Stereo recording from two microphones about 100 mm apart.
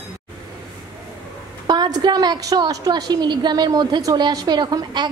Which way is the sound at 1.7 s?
40° right (ahead or behind).